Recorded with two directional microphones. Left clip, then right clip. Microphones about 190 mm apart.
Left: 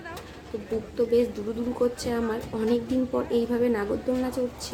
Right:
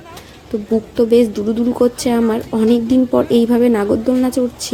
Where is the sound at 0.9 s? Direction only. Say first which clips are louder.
Right 10 dB; 40° right (ahead or behind).